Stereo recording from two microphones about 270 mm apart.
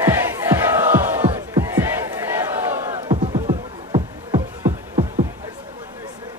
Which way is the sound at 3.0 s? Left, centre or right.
Centre.